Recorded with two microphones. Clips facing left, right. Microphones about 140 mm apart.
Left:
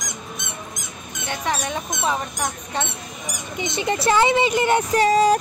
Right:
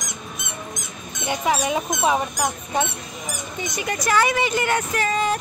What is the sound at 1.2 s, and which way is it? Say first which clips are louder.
Speech: right 4 dB; 10° right (ahead or behind).